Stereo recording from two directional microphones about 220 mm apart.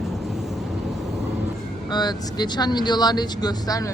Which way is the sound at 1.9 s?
20° left (ahead or behind).